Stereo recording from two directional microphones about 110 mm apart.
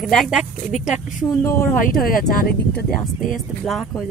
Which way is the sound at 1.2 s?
25° left (ahead or behind).